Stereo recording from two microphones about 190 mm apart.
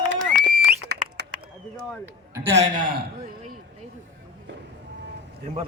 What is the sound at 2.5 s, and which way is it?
Speech, 35° right (ahead or behind).